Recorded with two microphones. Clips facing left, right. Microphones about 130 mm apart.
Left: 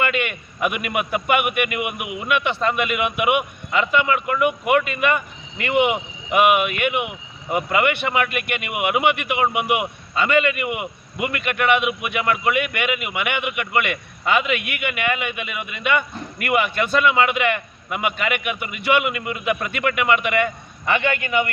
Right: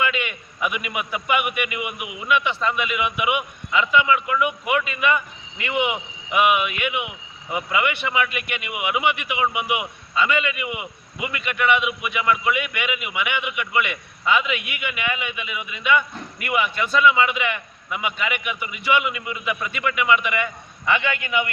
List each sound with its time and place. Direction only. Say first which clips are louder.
0.0 s a man's voice: left 2 dB; 60° left (ahead or behind)